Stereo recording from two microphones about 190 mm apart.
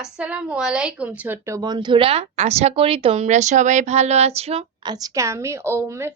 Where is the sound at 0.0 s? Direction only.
5° right (ahead or behind).